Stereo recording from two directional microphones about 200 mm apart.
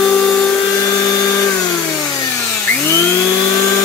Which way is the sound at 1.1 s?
15° left (ahead or behind).